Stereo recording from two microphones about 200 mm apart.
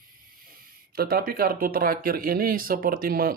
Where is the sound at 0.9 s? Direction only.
50° right (ahead or behind).